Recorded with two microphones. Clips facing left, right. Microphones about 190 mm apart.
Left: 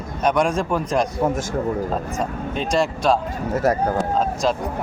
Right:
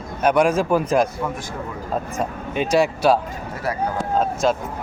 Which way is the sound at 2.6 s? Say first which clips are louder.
Right 3 dB; 5° right (ahead or behind).